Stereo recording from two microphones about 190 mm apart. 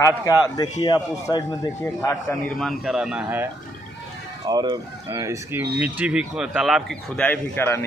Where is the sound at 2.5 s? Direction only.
Centre (ahead or behind).